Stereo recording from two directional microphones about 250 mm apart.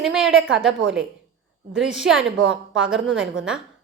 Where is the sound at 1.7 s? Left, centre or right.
Centre.